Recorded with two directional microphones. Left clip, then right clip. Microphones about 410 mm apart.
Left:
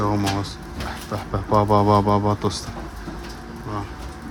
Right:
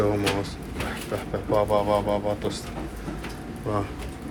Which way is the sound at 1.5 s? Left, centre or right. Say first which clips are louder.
Left 5 dB; left.